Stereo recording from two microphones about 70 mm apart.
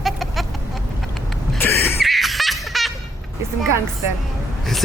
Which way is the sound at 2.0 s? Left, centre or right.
Centre.